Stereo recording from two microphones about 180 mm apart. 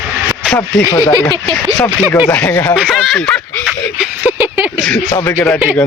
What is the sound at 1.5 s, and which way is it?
Speech, centre (ahead or behind).